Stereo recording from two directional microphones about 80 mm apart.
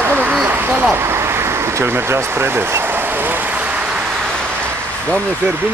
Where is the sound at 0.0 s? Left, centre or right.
Right.